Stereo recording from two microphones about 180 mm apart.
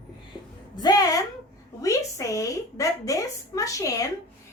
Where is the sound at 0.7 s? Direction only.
20° left (ahead or behind).